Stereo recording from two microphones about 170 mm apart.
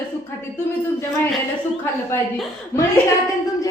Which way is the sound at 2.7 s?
10° left (ahead or behind).